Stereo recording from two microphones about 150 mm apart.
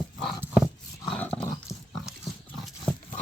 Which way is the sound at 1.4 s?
20° left (ahead or behind).